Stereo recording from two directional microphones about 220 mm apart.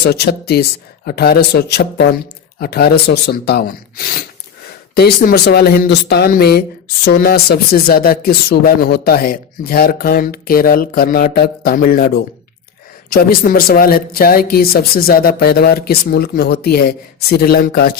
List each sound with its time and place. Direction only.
0.0 s speech: 50° left (ahead or behind)